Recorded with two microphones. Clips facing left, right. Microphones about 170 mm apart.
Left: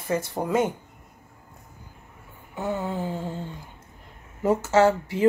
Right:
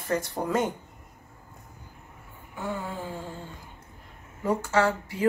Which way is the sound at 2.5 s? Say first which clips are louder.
Left 5 dB; 20° left (ahead or behind).